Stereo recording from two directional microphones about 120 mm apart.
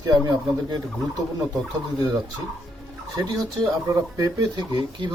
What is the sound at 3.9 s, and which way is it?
Speech, 30° right (ahead or behind).